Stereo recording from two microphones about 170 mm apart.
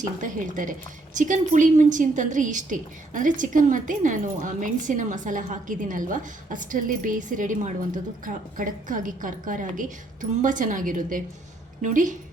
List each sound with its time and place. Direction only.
0.2 s a woman's voice: 50° right (ahead or behind)